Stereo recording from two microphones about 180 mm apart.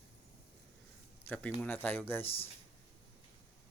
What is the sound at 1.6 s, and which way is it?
Speech, 10° left (ahead or behind).